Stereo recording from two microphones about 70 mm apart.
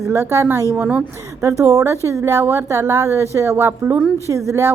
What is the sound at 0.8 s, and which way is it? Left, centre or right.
Speech, centre.